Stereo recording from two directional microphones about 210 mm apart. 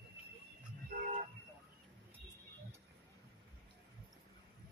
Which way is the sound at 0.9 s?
35° right (ahead or behind).